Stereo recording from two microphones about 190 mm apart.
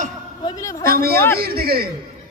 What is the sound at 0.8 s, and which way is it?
A man's voice, 50° right (ahead or behind).